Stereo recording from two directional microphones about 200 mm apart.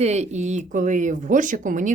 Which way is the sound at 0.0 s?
35° right (ahead or behind).